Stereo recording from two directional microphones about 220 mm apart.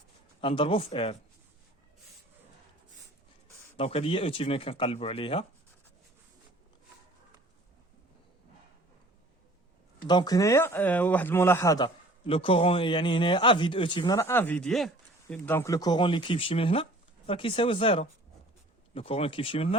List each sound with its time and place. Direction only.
0.4 s speech: 25° left (ahead or behind)
3.8 s speech: 25° left (ahead or behind)
10.1 s speech: 20° left (ahead or behind)